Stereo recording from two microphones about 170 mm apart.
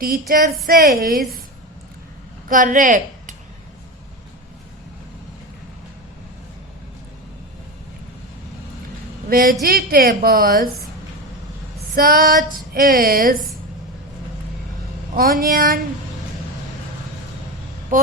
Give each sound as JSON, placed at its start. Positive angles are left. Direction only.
{"t": 0.0, "sound": "female singing", "side_deg": -55}
{"t": 2.5, "sound": "a woman's voice", "side_deg": -50}
{"t": 9.3, "sound": "female singing", "side_deg": -55}
{"t": 11.9, "sound": "female singing", "side_deg": -60}
{"t": 15.1, "sound": "female singing", "side_deg": -60}
{"t": 17.9, "sound": "vehicle", "side_deg": -50}